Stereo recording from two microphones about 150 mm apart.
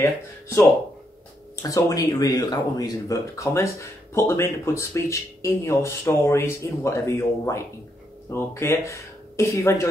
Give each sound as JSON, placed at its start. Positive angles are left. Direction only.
{"t": 1.6, "sound": "speech", "side_deg": 20}